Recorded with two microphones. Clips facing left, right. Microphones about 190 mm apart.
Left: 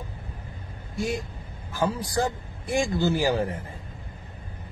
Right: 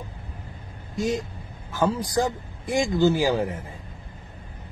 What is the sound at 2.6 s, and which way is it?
Speech, 15° right (ahead or behind).